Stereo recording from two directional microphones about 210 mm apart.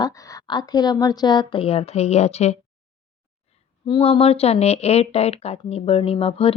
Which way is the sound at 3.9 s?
25° left (ahead or behind).